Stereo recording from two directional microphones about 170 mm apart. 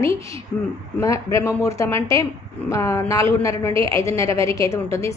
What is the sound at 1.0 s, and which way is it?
A woman's voice, 20° left (ahead or behind).